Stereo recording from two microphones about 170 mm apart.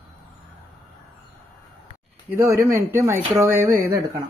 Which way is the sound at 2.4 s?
15° right (ahead or behind).